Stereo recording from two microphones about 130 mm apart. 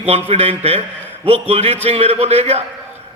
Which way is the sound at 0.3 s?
50° right (ahead or behind).